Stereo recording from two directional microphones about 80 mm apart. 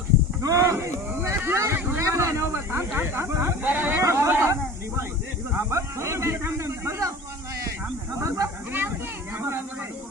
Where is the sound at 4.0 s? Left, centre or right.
Right.